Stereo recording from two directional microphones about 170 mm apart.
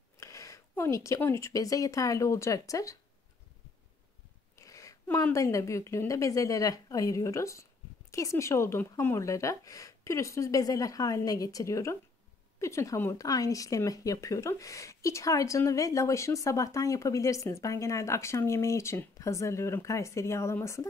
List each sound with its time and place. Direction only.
0.2 s speech: 20° left (ahead or behind)
4.6 s speech: 20° left (ahead or behind)